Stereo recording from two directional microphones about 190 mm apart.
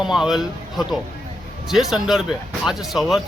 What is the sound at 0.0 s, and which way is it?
Speech, 5° right (ahead or behind).